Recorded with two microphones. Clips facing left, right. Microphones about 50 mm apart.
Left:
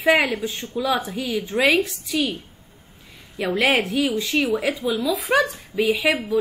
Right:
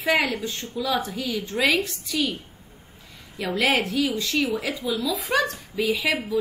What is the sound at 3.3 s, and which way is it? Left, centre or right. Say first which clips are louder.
Speech: left 4 dB; centre.